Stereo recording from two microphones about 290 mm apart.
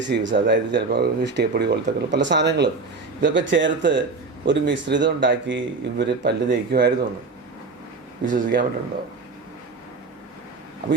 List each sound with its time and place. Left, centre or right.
0.0 s speech: right
8.2 s speech: right